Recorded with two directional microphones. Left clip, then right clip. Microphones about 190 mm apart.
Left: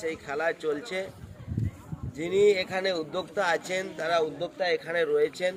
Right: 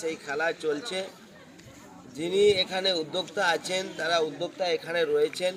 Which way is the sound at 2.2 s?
Centre (ahead or behind).